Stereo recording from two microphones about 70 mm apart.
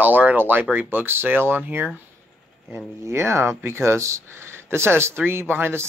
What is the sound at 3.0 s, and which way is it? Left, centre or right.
Speech, right.